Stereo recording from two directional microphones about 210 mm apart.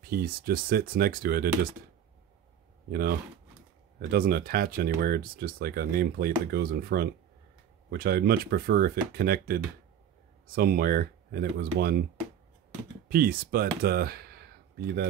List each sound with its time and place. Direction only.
0.0 s speech: 45° right (ahead or behind)
2.9 s speech: 45° right (ahead or behind)
13.1 s speech: 45° right (ahead or behind)